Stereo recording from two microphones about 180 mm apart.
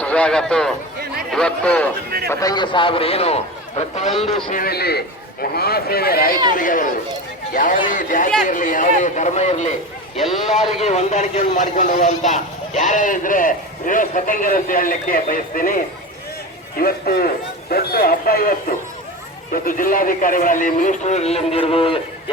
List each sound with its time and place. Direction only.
0.0 s a man's voice: 5° left (ahead or behind)
2.3 s a man's voice: 20° left (ahead or behind); by 4.1 s 35° left (ahead or behind)
4.4 s a man's voice: 50° left (ahead or behind)
19.5 s speech: 50° left (ahead or behind); by 22.0 s 30° left (ahead or behind)